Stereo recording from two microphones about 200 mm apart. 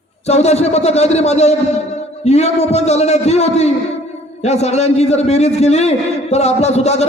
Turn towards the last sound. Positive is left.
turn(degrees=35)  # may be behind; listen again after turning